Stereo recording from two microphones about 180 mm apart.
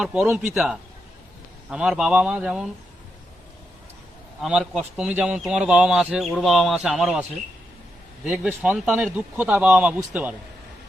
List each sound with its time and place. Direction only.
0.0 s speech: 5° right (ahead or behind)
4.4 s a man's voice: 5° right (ahead or behind)